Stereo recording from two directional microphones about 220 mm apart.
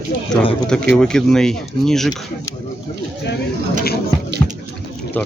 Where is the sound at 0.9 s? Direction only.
5° left (ahead or behind).